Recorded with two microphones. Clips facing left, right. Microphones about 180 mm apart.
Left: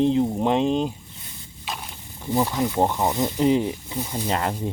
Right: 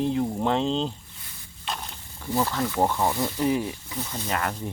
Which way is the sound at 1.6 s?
5° left (ahead or behind).